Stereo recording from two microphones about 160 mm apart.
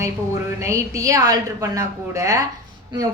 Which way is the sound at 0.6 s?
20° right (ahead or behind).